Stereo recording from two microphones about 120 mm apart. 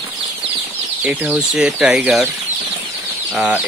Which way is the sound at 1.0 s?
10° right (ahead or behind).